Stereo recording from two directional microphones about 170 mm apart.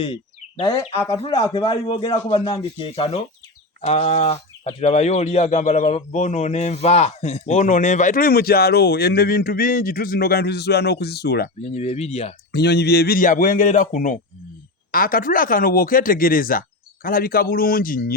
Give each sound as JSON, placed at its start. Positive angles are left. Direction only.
{"t": 0.0, "sound": "speech", "side_deg": 30}
{"t": 1.3, "sound": "a man's voice", "side_deg": 20}
{"t": 1.5, "sound": "a man's voice", "side_deg": 30}
{"t": 11.6, "sound": "a man's voice", "side_deg": 40}
{"t": 12.5, "sound": "speech", "side_deg": 75}